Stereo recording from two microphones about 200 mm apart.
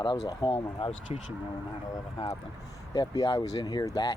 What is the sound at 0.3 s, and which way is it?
Speech, 25° left (ahead or behind).